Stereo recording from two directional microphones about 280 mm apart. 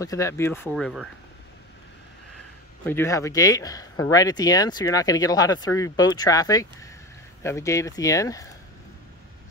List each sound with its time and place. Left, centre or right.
0.0 s speech: centre
2.8 s speech: centre